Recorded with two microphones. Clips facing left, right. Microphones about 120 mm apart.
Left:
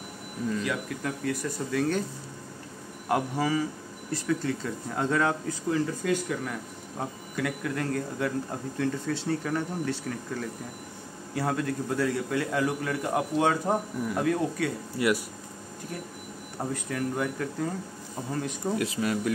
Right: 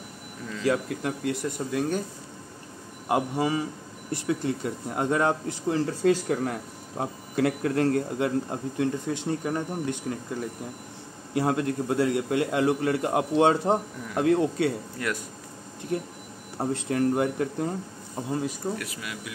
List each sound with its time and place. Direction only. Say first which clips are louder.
0.7 s speech: right 5 dB; 25° right (ahead or behind)
1.7 s speech: left 1 dB; 15° right (ahead or behind)
3.1 s speech: right 1 dB; 20° right (ahead or behind); by 6.6 s 40° right (ahead or behind)
7.0 s speech: right 6 dB; 30° right (ahead or behind)
15.0 s speech: left 6 dB; 10° left (ahead or behind)
16.5 s speech: right 5 dB; 30° right (ahead or behind)
18.6 s speech: left 6 dB; 5° right (ahead or behind)
18.9 s speech: left 10 dB; 40° left (ahead or behind)